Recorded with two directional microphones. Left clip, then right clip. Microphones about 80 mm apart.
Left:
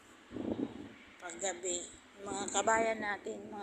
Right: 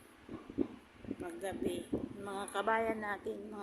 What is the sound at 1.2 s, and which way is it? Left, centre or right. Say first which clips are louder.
Speech: left 1 dB; right.